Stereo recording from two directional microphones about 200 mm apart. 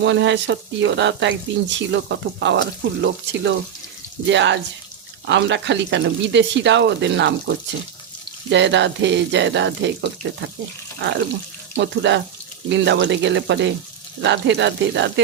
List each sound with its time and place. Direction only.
0.0 s speech: 65° right (ahead or behind)